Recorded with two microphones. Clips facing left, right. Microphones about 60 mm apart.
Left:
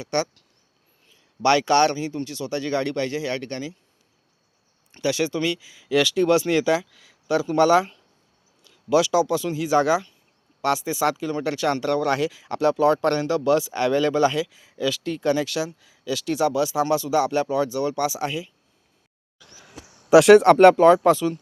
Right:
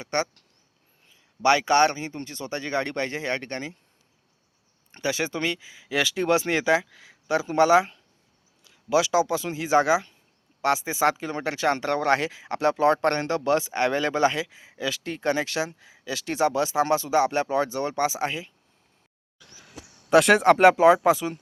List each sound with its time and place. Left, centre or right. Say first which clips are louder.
0.0 s speech: left 2 dB; right
4.9 s speech: left 4 dB; right
20.1 s speech: left 5 dB; centre